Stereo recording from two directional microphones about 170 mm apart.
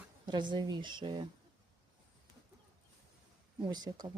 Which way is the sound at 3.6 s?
25° right (ahead or behind).